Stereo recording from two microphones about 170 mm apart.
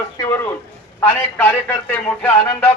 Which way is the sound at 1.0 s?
10° left (ahead or behind).